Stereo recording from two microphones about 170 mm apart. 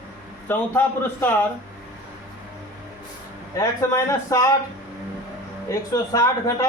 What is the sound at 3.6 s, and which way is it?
Speech, 15° left (ahead or behind).